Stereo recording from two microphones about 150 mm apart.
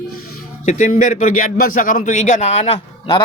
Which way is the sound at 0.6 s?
60° left (ahead or behind).